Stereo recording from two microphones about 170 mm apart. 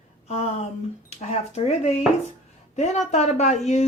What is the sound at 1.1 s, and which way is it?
Speech, 40° left (ahead or behind).